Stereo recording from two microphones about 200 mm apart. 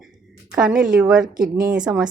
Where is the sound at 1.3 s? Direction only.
45° right (ahead or behind).